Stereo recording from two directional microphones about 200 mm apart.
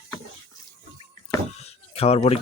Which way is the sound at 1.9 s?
30° left (ahead or behind).